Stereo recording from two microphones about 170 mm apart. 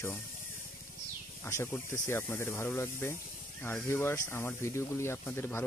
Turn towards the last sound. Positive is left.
turn(degrees=10)  # may be behind; listen again after turning